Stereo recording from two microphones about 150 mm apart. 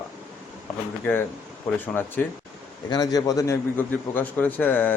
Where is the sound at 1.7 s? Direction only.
15° left (ahead or behind).